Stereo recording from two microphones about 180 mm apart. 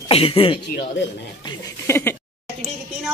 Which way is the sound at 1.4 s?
15° left (ahead or behind).